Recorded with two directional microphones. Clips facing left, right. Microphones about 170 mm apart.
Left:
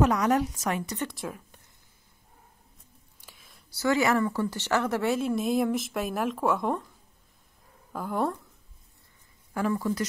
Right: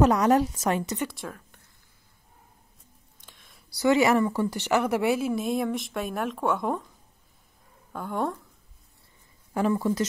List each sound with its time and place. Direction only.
0.0 s a woman's voice: 30° right (ahead or behind)
0.9 s speech: centre (ahead or behind)
3.2 s a sound: 5° left (ahead or behind)
3.7 s speech: 20° right (ahead or behind); by 6.9 s centre (ahead or behind)
7.9 s speech: centre (ahead or behind)
9.5 s speech: 25° right (ahead or behind)